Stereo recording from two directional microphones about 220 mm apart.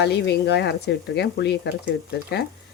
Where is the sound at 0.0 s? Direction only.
50° left (ahead or behind).